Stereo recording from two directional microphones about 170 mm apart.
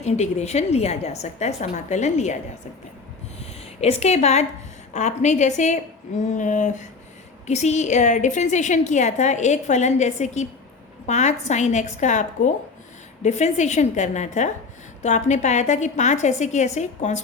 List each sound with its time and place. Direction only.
0.0 s a woman's voice: 40° left (ahead or behind)
3.8 s a woman's voice: 40° left (ahead or behind)